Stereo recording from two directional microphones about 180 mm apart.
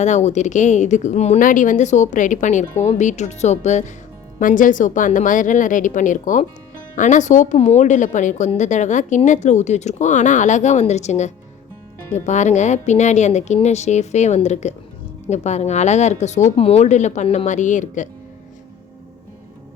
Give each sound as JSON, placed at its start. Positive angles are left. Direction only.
{"t": 0.0, "sound": "a woman's voice", "side_deg": 40}